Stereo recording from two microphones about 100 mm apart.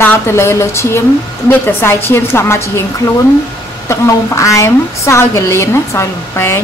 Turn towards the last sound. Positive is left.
turn(degrees=25)  # may be behind; listen again after turning